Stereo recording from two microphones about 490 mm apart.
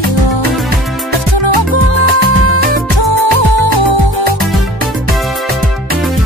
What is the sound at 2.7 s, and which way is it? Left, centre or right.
Music, left.